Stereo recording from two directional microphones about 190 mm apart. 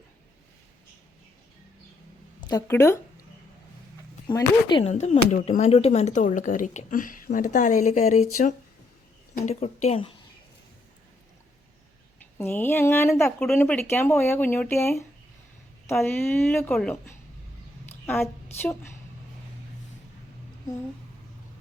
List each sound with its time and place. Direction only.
2.5 s speech: 15° left (ahead or behind)
4.3 s speech: 25° left (ahead or behind)
4.9 s speech: 35° left (ahead or behind)
12.4 s speech: 10° left (ahead or behind)
18.0 s a woman's voice: 10° left (ahead or behind)